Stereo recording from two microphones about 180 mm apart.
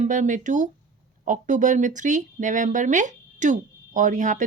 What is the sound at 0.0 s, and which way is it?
A woman's voice, 45° right (ahead or behind).